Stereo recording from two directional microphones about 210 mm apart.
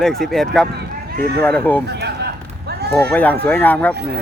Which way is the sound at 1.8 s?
50° right (ahead or behind).